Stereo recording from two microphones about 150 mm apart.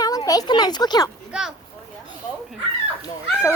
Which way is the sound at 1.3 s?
5° right (ahead or behind).